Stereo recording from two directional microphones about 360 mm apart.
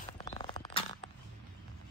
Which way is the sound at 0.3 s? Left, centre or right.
Centre.